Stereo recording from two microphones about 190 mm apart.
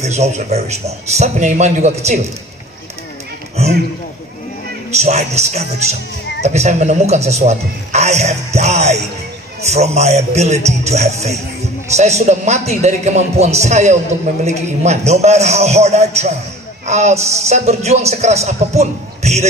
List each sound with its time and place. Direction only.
0.0 s a man's voice: 35° right (ahead or behind)
3.6 s a sound: 35° right (ahead or behind)
4.9 s a man's voice: 35° right (ahead or behind)